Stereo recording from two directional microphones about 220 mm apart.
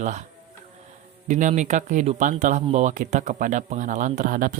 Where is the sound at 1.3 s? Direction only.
35° right (ahead or behind).